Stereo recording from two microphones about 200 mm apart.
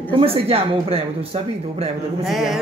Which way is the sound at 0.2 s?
30° right (ahead or behind).